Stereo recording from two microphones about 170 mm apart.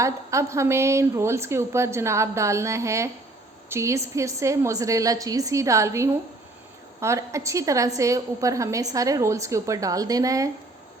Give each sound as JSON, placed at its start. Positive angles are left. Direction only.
{"t": 0.0, "sound": "a woman's voice", "side_deg": -15}